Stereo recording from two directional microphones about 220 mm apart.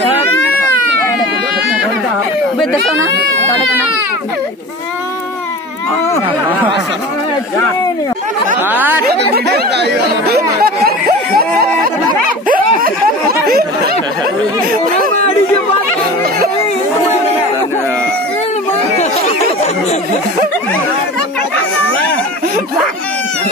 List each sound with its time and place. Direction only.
8.6 s speech: 10° right (ahead or behind)
9.3 s speech: 50° right (ahead or behind)
10.3 s a sound: 45° right (ahead or behind)